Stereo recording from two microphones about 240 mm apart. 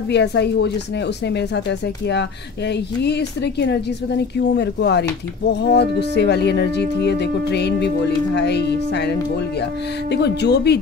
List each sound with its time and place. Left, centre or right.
0.1 s speech: left
10.1 s speech: left